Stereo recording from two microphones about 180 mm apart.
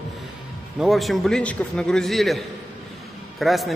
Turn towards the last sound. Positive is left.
turn(degrees=0)  # may be behind; listen again after turning